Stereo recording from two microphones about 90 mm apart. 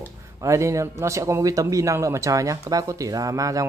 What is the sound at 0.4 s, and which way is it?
Speech, 35° right (ahead or behind).